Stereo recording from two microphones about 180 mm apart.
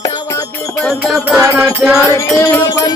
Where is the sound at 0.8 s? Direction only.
Centre (ahead or behind).